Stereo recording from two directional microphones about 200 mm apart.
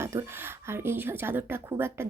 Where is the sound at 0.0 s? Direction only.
15° right (ahead or behind).